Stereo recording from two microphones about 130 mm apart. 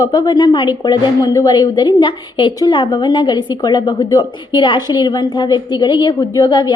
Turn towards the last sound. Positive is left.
turn(degrees=35)  # may be behind; listen again after turning